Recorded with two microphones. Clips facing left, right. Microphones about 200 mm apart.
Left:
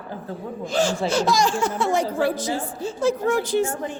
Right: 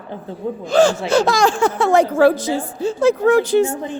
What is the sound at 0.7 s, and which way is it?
Speech, 60° right (ahead or behind).